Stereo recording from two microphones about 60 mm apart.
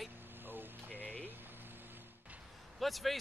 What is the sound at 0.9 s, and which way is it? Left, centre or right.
Speech, left.